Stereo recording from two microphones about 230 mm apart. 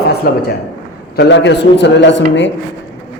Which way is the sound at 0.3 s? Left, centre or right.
Left.